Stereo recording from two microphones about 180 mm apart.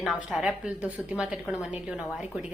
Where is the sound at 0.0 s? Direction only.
5° right (ahead or behind).